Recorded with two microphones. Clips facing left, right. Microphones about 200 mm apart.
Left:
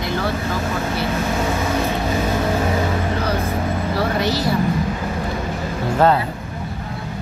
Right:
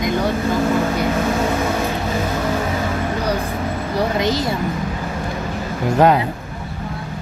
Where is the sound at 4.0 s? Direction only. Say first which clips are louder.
Right 3 dB; 20° right (ahead or behind).